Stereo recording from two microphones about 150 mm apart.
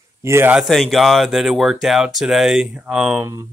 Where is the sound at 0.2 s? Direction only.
15° right (ahead or behind).